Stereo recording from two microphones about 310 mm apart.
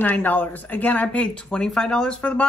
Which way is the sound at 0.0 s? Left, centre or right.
Centre.